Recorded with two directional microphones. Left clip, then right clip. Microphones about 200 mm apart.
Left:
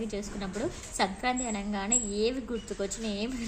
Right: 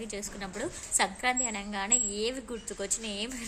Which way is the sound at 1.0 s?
30° right (ahead or behind).